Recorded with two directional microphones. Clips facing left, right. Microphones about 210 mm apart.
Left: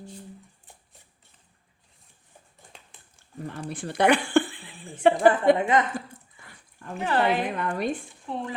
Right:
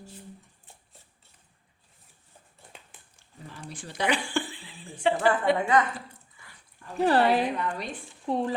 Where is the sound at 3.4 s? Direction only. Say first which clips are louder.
Left 8 dB; 55° left (ahead or behind).